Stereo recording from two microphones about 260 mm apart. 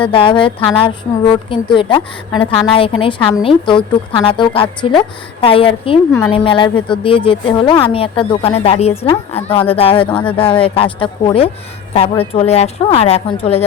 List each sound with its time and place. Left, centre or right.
0.0 s speech: centre